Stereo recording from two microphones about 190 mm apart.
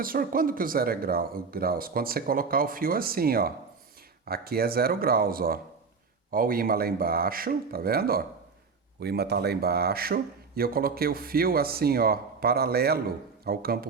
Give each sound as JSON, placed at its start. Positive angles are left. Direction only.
{"t": 0.0, "sound": "a man's voice", "side_deg": -50}